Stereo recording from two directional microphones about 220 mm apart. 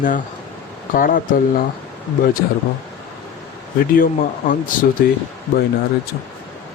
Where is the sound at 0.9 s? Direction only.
40° left (ahead or behind).